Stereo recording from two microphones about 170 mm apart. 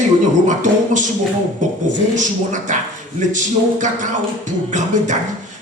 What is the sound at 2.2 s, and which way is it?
A man's voice, 50° right (ahead or behind).